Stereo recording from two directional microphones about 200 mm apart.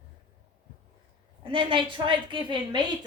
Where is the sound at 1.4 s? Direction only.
25° right (ahead or behind).